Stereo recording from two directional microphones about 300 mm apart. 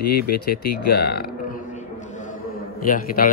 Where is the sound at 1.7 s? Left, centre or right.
Left.